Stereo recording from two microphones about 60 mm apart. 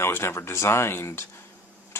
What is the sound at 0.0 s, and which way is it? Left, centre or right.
Speech, left.